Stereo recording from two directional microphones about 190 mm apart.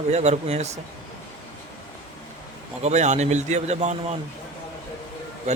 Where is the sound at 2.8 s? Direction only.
35° right (ahead or behind).